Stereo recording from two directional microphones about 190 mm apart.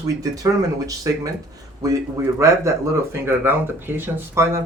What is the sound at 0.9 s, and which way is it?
Speech, 20° right (ahead or behind).